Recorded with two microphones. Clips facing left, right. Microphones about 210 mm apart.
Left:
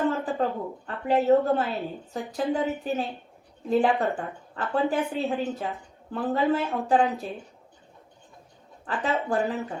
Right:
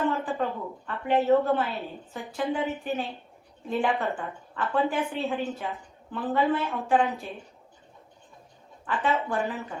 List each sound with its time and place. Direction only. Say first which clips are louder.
0.1 s a sound: left 2 dB; 35° left (ahead or behind)
0.9 s a woman's voice: left 1 dB; 35° left (ahead or behind)
8.9 s a woman's voice: left 1 dB; 35° left (ahead or behind)